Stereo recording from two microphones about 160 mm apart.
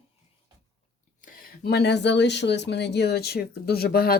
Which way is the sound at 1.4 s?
80° left.